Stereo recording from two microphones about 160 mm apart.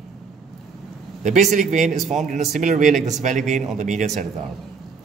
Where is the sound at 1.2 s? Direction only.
50° right (ahead or behind).